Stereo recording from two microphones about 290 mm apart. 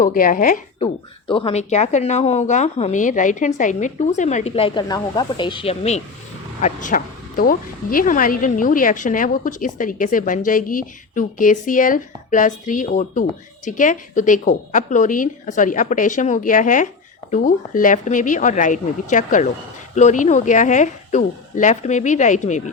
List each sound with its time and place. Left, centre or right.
0.0 s speech: left